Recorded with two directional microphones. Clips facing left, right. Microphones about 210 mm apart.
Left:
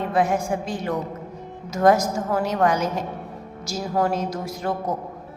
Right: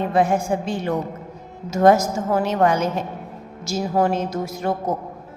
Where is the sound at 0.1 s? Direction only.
25° right (ahead or behind).